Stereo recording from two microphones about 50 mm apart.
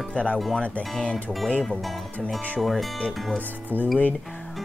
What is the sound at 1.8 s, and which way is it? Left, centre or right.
Speech, centre.